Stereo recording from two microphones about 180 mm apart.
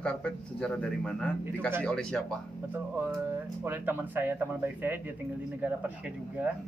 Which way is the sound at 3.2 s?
10° right (ahead or behind).